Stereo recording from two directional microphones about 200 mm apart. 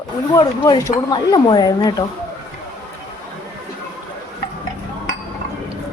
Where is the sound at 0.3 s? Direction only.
15° left (ahead or behind).